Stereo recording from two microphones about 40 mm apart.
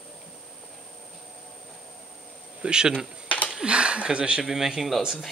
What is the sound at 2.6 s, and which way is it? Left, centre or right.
Speech, right.